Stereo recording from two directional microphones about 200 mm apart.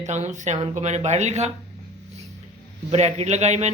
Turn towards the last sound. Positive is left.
turn(degrees=-35)  # may be behind; listen again after turning